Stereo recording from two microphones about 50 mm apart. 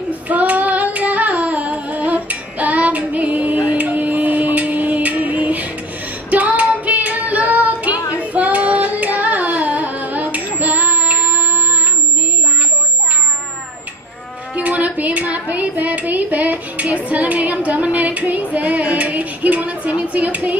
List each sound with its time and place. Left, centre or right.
0.1 s child singing: right
10.6 s music: right
14.5 s a sound: right